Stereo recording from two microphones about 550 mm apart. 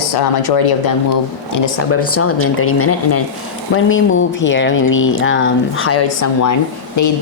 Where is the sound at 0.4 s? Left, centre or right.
Left.